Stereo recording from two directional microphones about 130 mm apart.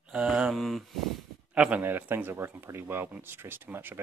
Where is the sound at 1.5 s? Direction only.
10° right (ahead or behind).